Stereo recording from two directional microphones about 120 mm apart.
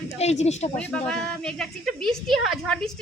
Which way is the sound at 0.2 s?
65° left (ahead or behind).